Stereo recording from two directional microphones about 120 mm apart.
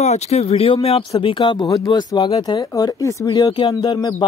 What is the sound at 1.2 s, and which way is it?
Speech, 40° left (ahead or behind).